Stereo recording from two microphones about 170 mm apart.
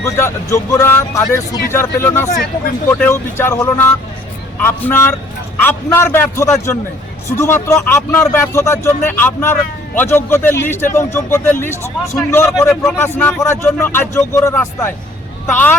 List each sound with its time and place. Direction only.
0.0 s a man's voice: 15° left (ahead or behind)